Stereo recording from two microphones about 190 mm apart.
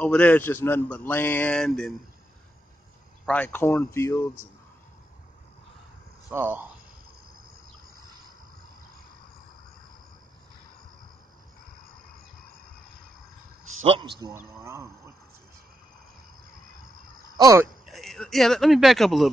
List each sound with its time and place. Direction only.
0.0 s a man's voice: 10° left (ahead or behind)
3.3 s a man's voice: 10° left (ahead or behind)
6.3 s speech: 10° right (ahead or behind)
13.8 s a man's voice: 25° right (ahead or behind)
14.3 s speech: 15° right (ahead or behind)
17.4 s speech: 15° right (ahead or behind)
17.8 s speech: centre (ahead or behind)